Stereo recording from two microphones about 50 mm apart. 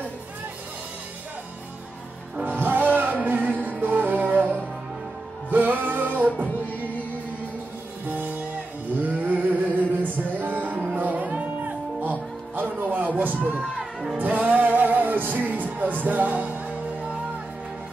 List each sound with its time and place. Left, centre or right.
2.4 s music: right
8.1 s music: right
9.0 s a sound: right
10.0 s music: right